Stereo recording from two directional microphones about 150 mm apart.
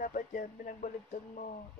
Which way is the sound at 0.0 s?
65° left (ahead or behind).